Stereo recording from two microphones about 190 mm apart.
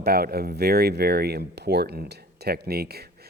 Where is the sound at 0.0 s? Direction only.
55° right (ahead or behind).